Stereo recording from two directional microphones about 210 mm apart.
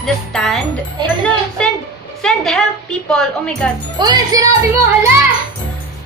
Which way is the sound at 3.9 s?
20° right (ahead or behind).